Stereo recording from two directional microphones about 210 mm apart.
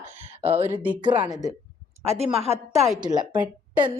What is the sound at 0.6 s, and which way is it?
Speech, 10° right (ahead or behind).